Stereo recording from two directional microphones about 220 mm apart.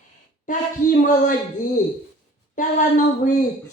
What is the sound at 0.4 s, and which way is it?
Speech, 35° left (ahead or behind).